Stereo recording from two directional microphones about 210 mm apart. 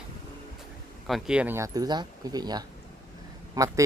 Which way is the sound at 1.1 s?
5° right (ahead or behind).